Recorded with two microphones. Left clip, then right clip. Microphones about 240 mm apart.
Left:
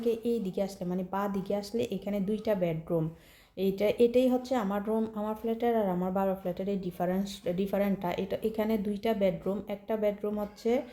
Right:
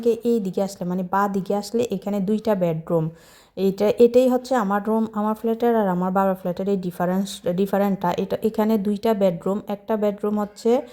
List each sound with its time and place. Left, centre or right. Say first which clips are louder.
0.0 s speech: right 9 dB; right